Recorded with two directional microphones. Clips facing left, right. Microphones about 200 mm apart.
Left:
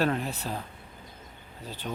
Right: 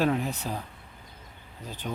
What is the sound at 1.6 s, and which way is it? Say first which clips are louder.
Speech: right 1 dB; 15° right (ahead or behind).